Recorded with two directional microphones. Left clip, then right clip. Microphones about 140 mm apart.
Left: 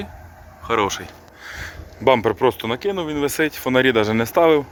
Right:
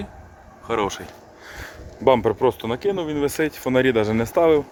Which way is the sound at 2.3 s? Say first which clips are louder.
Left 2 dB; 10° right (ahead or behind).